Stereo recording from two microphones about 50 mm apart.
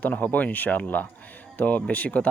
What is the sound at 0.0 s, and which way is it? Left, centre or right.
A man's voice, left.